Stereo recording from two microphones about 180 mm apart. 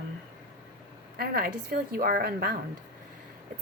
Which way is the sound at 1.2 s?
55° right (ahead or behind).